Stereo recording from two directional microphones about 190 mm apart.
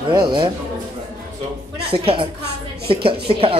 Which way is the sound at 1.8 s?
30° right (ahead or behind).